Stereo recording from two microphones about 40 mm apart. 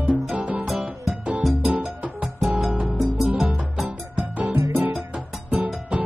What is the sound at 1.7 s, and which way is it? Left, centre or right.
Music, right.